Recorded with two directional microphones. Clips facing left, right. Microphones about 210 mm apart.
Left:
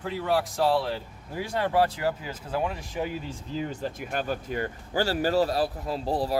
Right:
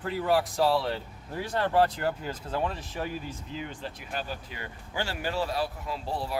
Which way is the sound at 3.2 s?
35° left (ahead or behind).